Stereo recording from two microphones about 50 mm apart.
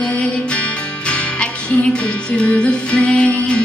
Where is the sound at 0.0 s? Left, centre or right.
Left.